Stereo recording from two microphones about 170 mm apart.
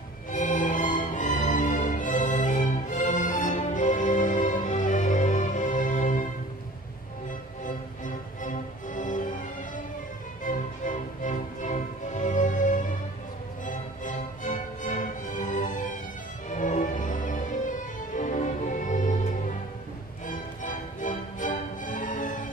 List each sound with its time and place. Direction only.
0.3 s music: 45° left (ahead or behind)
7.6 s music: 50° left (ahead or behind)
10.4 s music: 50° left (ahead or behind)